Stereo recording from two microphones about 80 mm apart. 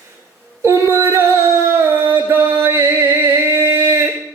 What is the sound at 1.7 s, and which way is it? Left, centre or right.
Music, right.